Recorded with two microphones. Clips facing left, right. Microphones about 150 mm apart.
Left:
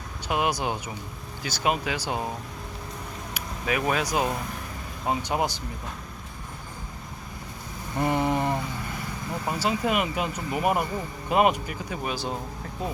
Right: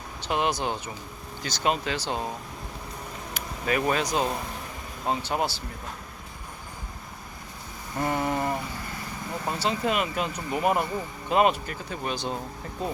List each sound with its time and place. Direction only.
0.3 s speech: 10° left (ahead or behind)
3.3 s speech: 5° left (ahead or behind)
7.9 s a sound: 20° left (ahead or behind)
9.5 s speech: 10° left (ahead or behind)